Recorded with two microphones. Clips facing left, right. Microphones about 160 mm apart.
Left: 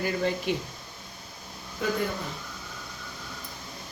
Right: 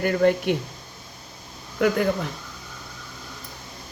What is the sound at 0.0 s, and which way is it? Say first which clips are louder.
Speech: right 8 dB; 60° right (ahead or behind).